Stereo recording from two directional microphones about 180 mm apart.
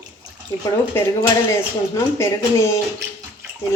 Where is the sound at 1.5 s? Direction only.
15° left (ahead or behind).